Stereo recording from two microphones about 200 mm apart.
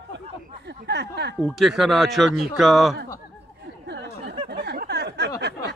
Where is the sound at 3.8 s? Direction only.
60° right (ahead or behind).